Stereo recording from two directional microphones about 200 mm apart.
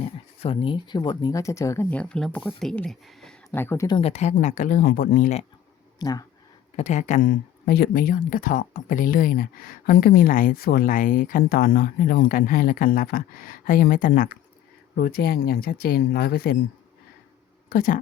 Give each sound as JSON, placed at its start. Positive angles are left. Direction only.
{"t": 0.4, "sound": "speech", "side_deg": 25}
{"t": 3.9, "sound": "speech", "side_deg": 30}
{"t": 6.0, "sound": "speech", "side_deg": 20}
{"t": 6.7, "sound": "speech", "side_deg": 35}
{"t": 17.7, "sound": "speech", "side_deg": 45}